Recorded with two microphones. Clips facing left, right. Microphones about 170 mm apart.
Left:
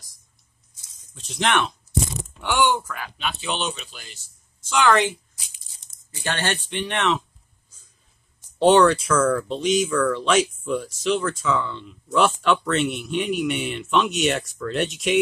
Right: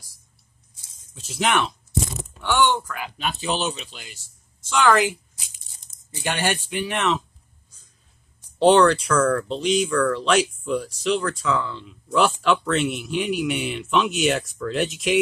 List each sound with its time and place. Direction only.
1.1 s speech: 5° right (ahead or behind)
2.4 s speech: 10° left (ahead or behind)
3.2 s speech: 40° right (ahead or behind)
3.9 s speech: 15° right (ahead or behind)
4.6 s speech: centre (ahead or behind)
6.2 s speech: 10° right (ahead or behind)
8.5 s speech: centre (ahead or behind)